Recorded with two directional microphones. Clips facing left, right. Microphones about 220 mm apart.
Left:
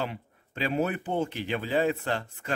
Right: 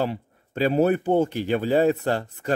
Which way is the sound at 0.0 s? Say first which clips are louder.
Right 7 dB; 40° right (ahead or behind).